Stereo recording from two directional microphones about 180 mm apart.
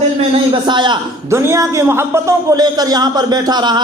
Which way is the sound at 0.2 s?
25° right (ahead or behind).